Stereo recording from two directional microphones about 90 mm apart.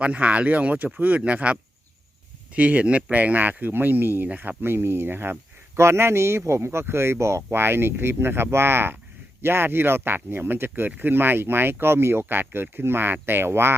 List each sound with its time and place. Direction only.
0.0 s speech: 15° right (ahead or behind)